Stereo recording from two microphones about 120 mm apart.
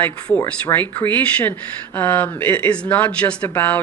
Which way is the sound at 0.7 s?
30° left (ahead or behind).